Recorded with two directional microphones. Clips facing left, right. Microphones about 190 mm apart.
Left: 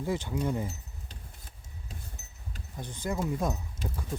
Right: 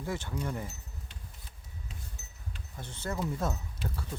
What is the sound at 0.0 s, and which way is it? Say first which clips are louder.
Speech: left 5 dB; 15° left (ahead or behind).